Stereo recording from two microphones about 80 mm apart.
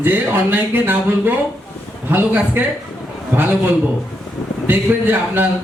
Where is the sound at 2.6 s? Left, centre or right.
Right.